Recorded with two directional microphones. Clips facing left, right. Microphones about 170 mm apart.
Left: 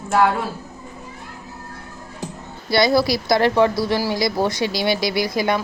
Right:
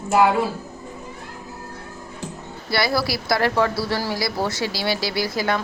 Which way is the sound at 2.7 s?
20° left (ahead or behind).